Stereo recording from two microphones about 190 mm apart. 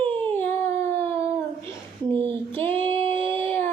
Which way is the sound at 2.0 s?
10° left (ahead or behind).